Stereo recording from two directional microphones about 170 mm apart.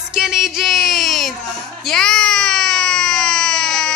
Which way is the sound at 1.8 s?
5° left (ahead or behind).